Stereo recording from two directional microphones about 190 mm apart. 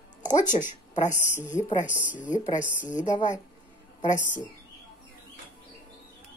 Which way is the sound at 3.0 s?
40° left (ahead or behind).